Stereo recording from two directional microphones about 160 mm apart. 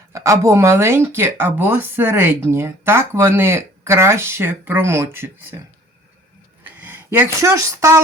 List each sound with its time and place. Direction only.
0.1 s speech: 20° right (ahead or behind)
6.7 s speech: 10° right (ahead or behind)